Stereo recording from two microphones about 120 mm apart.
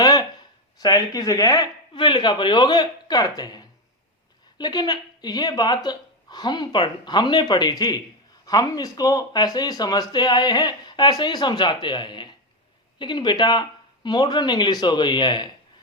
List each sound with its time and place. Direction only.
0.0 s a sound: 30° left (ahead or behind)
0.8 s speech: 30° left (ahead or behind)
2.0 s speech: 40° left (ahead or behind)